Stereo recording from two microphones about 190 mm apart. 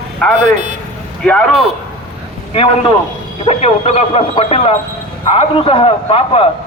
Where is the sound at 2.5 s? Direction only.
30° left (ahead or behind).